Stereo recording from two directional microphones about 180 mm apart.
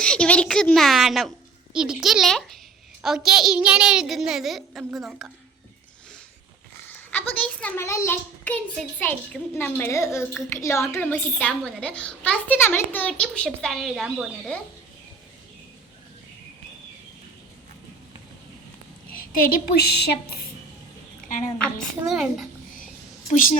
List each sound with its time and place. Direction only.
0.0 s a child's voice: 5° left (ahead or behind)
6.9 s a woman's voice: 10° left (ahead or behind)
19.1 s a woman's voice: 55° left (ahead or behind)
21.6 s a child's voice: centre (ahead or behind)
23.3 s a woman's voice: 50° left (ahead or behind)